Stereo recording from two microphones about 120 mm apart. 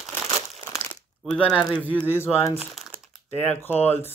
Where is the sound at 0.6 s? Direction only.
25° left (ahead or behind).